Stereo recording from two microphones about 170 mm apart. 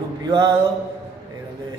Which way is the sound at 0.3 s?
25° right (ahead or behind).